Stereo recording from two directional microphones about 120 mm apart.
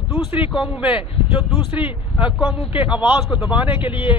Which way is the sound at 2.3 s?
10° right (ahead or behind).